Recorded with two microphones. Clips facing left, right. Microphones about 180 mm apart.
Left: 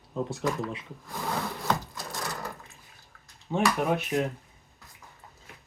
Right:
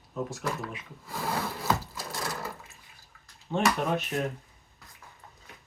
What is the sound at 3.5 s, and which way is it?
Speech, 10° left (ahead or behind).